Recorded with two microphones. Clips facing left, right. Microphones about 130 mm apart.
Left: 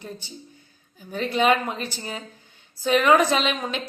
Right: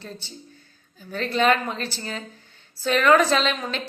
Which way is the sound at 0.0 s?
15° left (ahead or behind).